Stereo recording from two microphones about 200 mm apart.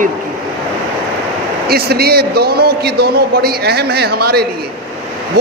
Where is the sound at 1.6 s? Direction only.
50° right (ahead or behind).